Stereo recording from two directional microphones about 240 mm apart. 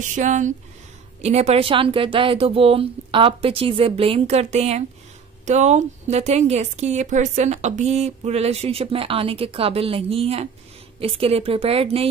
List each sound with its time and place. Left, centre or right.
0.0 s a woman's voice: right